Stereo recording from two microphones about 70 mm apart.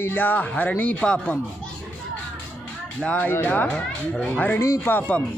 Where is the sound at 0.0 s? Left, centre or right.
Left.